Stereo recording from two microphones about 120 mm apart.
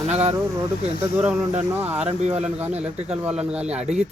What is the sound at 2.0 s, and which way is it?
Speech, 65° right (ahead or behind).